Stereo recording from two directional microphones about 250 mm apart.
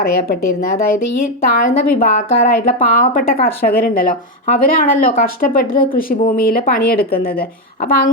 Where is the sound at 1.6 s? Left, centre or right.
Left.